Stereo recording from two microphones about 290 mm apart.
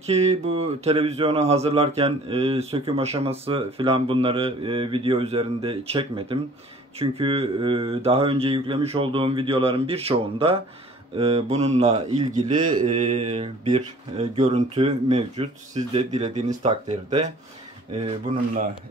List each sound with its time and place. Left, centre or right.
0.0 s speech: right